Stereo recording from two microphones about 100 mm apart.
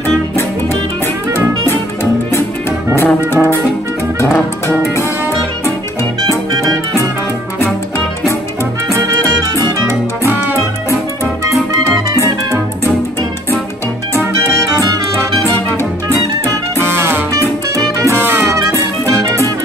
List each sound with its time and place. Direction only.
3.0 s music: 20° left (ahead or behind)
8.9 s music: 35° right (ahead or behind)
10.2 s music: 20° right (ahead or behind)
11.7 s music: 35° right (ahead or behind)
14.5 s music: 35° right (ahead or behind)
16.9 s music: 20° right (ahead or behind)